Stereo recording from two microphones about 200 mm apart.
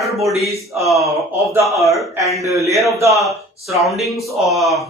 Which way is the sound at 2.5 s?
15° right (ahead or behind).